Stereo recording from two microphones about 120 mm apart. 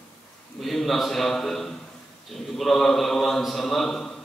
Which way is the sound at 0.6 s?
Centre (ahead or behind).